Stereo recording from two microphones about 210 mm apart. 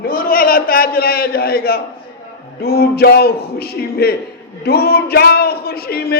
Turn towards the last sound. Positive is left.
turn(degrees=45)  # may be behind; listen again after turning